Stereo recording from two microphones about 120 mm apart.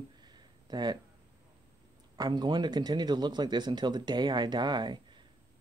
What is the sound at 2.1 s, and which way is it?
Speech, 35° right (ahead or behind).